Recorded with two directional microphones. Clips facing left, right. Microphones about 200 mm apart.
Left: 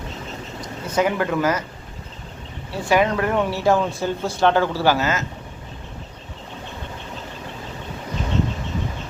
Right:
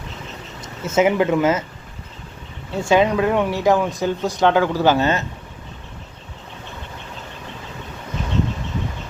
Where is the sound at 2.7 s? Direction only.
25° right (ahead or behind).